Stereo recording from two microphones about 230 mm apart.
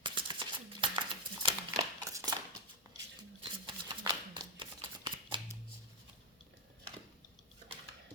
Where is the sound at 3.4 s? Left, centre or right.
Right.